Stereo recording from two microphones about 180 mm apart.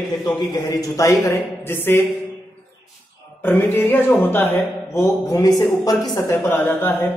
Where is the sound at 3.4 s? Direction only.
10° left (ahead or behind).